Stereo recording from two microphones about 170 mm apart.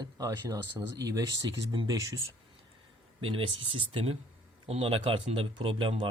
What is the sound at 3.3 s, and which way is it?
Speech, 30° right (ahead or behind).